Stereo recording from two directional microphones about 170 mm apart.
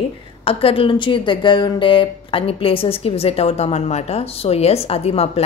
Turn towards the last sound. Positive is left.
turn(degrees=35)  # may be behind; listen again after turning